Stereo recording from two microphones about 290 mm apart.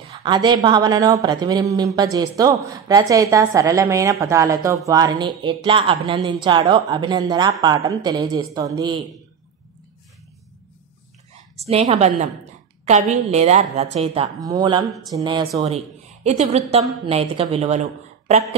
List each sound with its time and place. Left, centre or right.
0.1 s a woman's voice: centre
11.5 s a woman's voice: right